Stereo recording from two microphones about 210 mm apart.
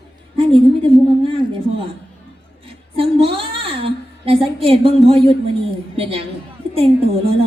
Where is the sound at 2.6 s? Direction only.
25° right (ahead or behind).